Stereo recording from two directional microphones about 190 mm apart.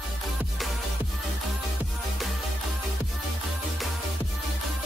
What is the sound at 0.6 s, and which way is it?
Music, centre (ahead or behind).